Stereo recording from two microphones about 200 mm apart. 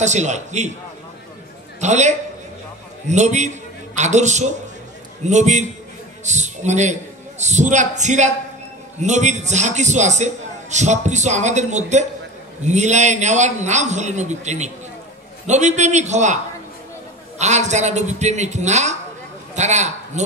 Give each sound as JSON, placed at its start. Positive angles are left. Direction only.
{"t": 0.0, "sound": "a man's voice", "side_deg": -35}
{"t": 1.8, "sound": "a man's voice", "side_deg": -35}
{"t": 17.4, "sound": "a man's voice", "side_deg": -35}